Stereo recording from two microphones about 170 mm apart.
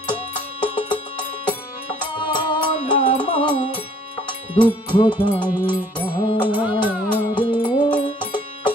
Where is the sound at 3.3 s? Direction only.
30° left (ahead or behind).